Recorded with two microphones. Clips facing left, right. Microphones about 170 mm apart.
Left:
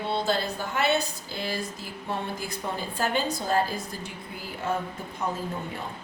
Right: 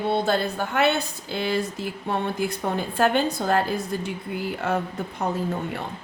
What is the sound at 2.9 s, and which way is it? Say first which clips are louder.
Speech: right 6 dB; 65° right (ahead or behind).